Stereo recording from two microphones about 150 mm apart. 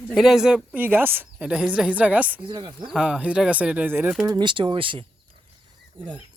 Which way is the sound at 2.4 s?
30° right (ahead or behind).